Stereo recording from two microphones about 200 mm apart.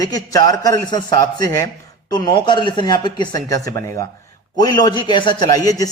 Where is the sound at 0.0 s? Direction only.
20° left (ahead or behind).